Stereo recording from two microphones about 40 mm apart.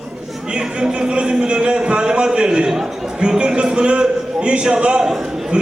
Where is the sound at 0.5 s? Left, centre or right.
Right.